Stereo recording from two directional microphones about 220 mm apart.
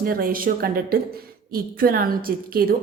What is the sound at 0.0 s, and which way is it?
A woman's voice, 40° right (ahead or behind).